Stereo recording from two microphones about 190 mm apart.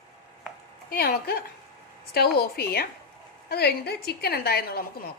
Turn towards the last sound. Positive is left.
turn(degrees=55)  # may be behind; listen again after turning